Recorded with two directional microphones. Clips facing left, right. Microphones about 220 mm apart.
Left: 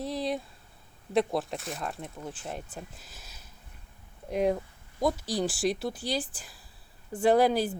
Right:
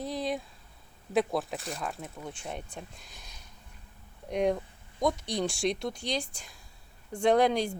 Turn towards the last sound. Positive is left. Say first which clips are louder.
# left 1 dB
turn(degrees=5)  # may be behind; listen again after turning